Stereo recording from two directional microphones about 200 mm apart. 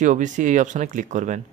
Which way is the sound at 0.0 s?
40° right (ahead or behind).